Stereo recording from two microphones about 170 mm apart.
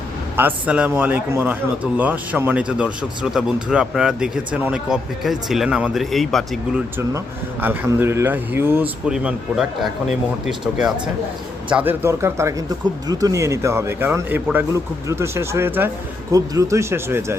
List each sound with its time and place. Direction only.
0.3 s a man's voice: 10° right (ahead or behind)
7.6 s a man's voice: 10° right (ahead or behind)